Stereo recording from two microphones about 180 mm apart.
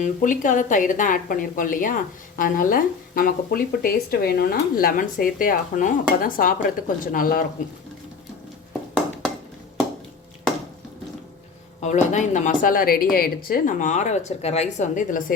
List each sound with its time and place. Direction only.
0.0 s speech: 45° left (ahead or behind)
11.8 s speech: 40° left (ahead or behind)